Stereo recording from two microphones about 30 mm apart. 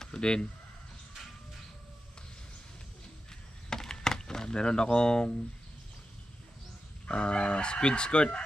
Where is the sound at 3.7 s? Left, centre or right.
Centre.